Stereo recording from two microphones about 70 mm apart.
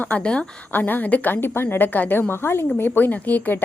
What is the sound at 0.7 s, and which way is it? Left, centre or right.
A woman's voice, left.